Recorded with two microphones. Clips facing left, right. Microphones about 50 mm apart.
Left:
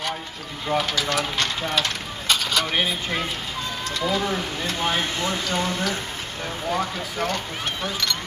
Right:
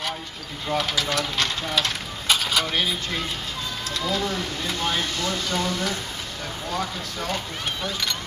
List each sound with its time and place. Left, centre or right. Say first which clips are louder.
0.7 s speech: left 1 dB; centre
1.8 s mechanisms: even; centre
2.7 s speech: left 2 dB; left